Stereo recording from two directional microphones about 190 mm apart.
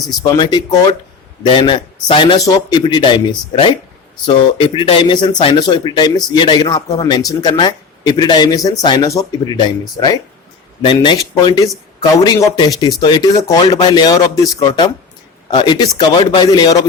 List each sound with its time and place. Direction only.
0.2 s speech: 20° left (ahead or behind)